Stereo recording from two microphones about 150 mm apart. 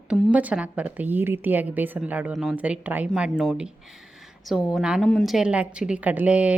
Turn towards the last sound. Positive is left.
turn(degrees=-10)  # may be behind; listen again after turning